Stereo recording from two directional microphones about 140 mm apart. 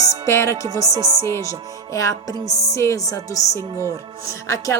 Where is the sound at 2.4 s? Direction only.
55° left (ahead or behind).